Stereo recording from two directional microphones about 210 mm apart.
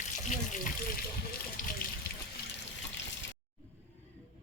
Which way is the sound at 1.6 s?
40° left (ahead or behind).